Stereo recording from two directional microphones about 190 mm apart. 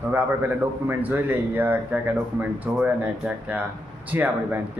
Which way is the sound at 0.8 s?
10° right (ahead or behind).